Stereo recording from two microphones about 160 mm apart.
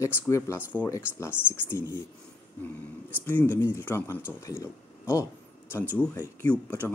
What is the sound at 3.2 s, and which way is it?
Speech, 15° left (ahead or behind).